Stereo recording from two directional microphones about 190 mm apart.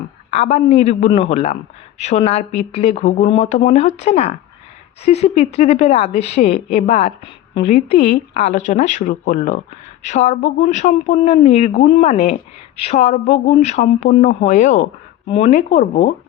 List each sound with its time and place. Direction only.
0.3 s speech: 35° left (ahead or behind)